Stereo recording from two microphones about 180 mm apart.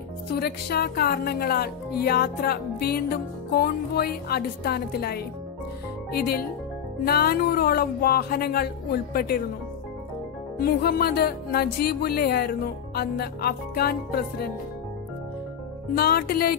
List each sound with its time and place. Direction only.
0.4 s speech: 60° left (ahead or behind)
10.6 s speech: 60° left (ahead or behind)
16.0 s speech: 60° left (ahead or behind)